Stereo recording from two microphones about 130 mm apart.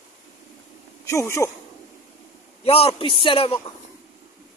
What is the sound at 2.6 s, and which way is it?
Speech, 50° left (ahead or behind).